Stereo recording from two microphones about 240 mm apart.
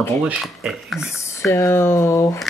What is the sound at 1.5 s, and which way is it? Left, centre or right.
Speech, centre.